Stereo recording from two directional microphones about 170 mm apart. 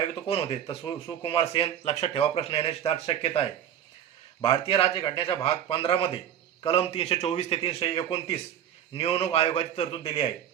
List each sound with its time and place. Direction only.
0.1 s a man's voice: 35° left (ahead or behind)